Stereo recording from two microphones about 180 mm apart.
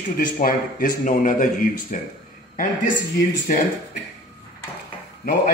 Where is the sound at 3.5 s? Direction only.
50° left (ahead or behind).